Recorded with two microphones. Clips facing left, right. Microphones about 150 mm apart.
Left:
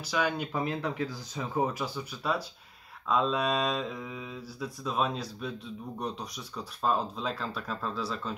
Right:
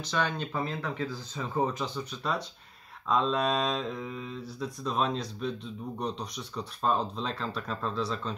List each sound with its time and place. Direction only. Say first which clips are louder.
0.0 s speech: left 1 dB; 10° left (ahead or behind)